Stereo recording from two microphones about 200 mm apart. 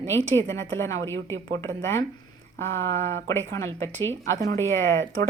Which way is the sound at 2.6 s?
15° left (ahead or behind).